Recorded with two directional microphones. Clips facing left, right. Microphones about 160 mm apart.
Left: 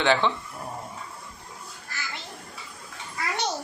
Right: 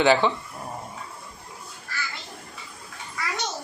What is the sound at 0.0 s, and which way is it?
Speech, 5° right (ahead or behind).